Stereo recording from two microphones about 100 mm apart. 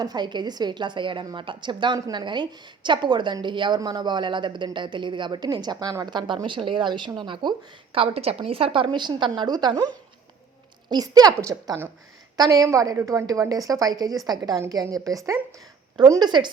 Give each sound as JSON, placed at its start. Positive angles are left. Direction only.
{"t": 0.0, "sound": "speech", "side_deg": -45}
{"t": 7.9, "sound": "a woman's voice", "side_deg": -75}